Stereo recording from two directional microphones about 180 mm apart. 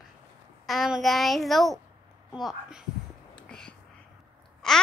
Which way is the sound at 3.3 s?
5° left (ahead or behind).